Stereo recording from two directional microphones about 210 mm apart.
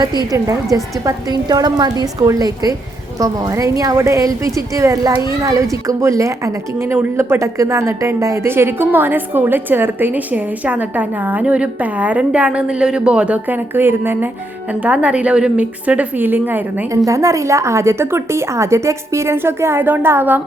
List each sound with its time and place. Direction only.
0.3 s a woman's voice: 15° right (ahead or behind)